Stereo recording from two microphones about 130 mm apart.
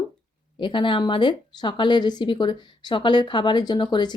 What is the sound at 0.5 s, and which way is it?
A woman's voice, 40° left (ahead or behind).